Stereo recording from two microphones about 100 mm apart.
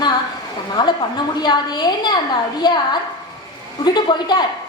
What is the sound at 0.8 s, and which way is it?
A woman's voice, 45° left (ahead or behind).